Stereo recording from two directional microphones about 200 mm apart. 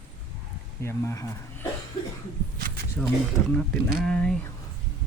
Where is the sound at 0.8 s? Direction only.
15° left (ahead or behind).